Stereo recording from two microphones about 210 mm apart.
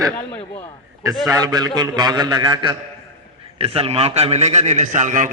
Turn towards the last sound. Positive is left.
turn(degrees=-35)  # may be behind; listen again after turning